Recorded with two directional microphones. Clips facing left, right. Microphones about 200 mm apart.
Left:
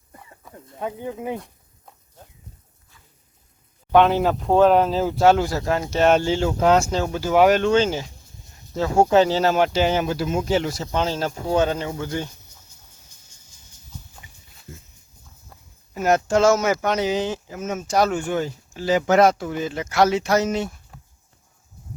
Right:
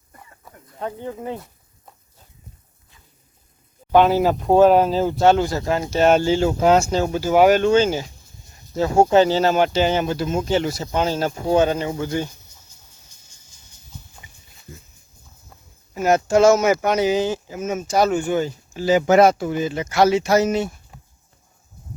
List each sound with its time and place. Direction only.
0.1 s a sound: 20° left (ahead or behind)
0.8 s speech: 10° left (ahead or behind)
3.9 s speech: 5° right (ahead or behind)
16.4 s speech: 15° right (ahead or behind)